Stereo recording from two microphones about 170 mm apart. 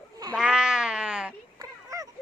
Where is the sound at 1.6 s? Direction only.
20° right (ahead or behind).